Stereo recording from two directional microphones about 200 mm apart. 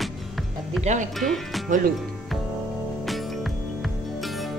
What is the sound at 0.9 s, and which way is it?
Speech, 35° right (ahead or behind).